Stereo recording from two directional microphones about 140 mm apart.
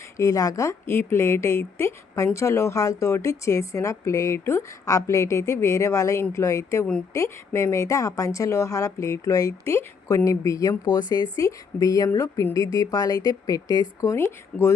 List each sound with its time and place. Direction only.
0.2 s speech: 25° left (ahead or behind)